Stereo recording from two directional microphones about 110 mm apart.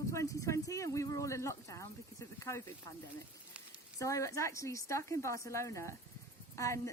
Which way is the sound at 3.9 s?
30° left (ahead or behind).